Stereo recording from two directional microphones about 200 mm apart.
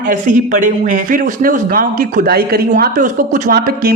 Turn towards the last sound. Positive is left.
turn(degrees=-45)  # may be behind; listen again after turning